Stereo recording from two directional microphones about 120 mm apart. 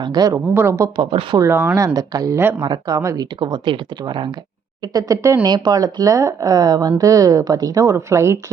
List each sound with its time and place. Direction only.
0.0 s speech: 35° right (ahead or behind)
0.5 s a woman's voice: 20° right (ahead or behind)
0.9 s speech: 40° right (ahead or behind)
1.4 s a woman's voice: 20° right (ahead or behind)
3.4 s speech: 40° right (ahead or behind)
4.9 s a woman's voice: 30° right (ahead or behind)